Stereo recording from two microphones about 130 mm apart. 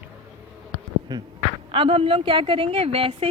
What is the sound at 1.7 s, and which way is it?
A woman's voice, 45° right (ahead or behind).